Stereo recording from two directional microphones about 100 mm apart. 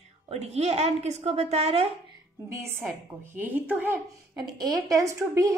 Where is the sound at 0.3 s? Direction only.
90° right.